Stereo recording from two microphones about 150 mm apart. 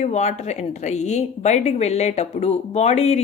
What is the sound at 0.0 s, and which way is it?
Speech, 50° left (ahead or behind).